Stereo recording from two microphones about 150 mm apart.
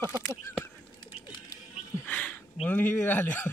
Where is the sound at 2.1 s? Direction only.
10° left (ahead or behind).